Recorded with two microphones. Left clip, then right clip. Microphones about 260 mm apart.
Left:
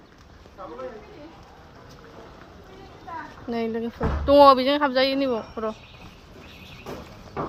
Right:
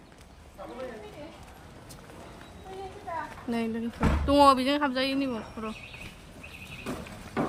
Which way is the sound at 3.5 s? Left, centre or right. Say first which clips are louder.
Left 6 dB; centre.